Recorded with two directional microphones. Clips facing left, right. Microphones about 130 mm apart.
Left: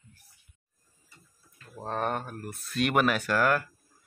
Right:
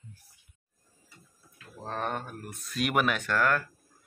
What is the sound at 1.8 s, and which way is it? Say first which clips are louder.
A woman's voice: left 3 dB; 5° left (ahead or behind).